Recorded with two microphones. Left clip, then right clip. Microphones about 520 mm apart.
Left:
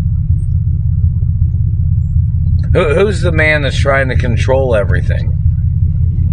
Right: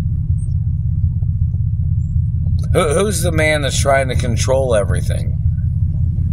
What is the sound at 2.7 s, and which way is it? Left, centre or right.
Speech, right.